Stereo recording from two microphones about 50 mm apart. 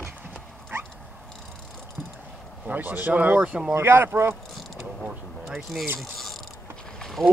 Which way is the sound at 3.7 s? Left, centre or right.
Right.